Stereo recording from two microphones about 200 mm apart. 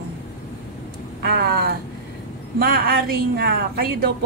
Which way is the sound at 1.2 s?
55° right (ahead or behind).